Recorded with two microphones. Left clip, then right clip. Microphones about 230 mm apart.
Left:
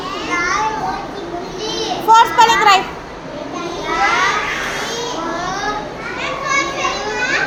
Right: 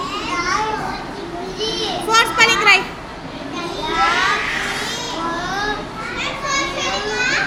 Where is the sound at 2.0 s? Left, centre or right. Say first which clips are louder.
Left 5 dB; centre.